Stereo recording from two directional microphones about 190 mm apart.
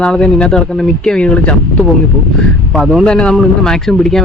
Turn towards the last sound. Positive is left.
turn(degrees=0)  # may be behind; listen again after turning